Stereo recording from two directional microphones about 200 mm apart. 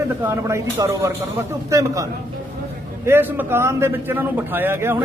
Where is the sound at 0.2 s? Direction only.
10° right (ahead or behind).